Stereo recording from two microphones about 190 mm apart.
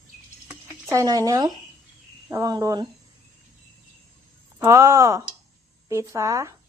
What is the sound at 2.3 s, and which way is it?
Speech, 20° right (ahead or behind).